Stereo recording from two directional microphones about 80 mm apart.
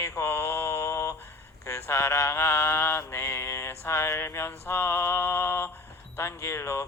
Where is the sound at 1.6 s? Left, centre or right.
Left.